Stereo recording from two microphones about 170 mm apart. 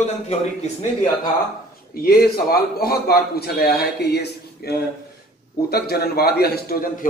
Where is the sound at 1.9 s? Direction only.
60° left (ahead or behind).